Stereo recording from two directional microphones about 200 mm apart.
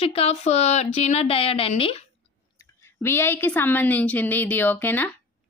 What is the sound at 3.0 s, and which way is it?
A woman's voice, 10° left (ahead or behind).